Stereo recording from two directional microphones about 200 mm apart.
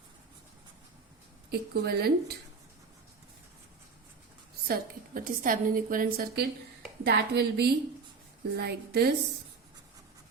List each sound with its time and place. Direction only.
1.5 s a woman's voice: 50° right (ahead or behind)
4.7 s a woman's voice: 45° right (ahead or behind)